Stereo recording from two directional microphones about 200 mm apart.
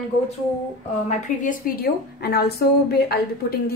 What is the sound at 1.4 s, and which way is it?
A woman's voice, 45° left (ahead or behind).